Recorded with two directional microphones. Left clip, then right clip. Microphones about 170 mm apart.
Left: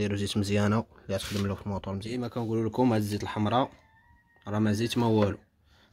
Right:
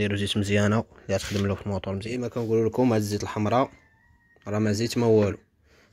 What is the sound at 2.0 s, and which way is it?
Speech, centre (ahead or behind).